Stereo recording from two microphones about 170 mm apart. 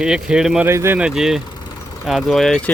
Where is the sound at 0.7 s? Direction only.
15° right (ahead or behind).